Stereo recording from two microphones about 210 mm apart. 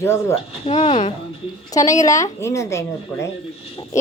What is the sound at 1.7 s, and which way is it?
Speech, 15° left (ahead or behind).